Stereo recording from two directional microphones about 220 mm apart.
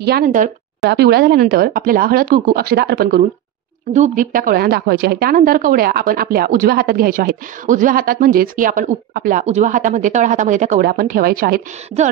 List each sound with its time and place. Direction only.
0.0 s a woman's voice: 45° right (ahead or behind)
3.9 s a woman's voice: 35° right (ahead or behind)